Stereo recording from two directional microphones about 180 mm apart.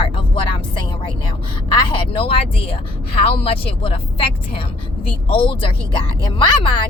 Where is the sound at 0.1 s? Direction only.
30° left (ahead or behind).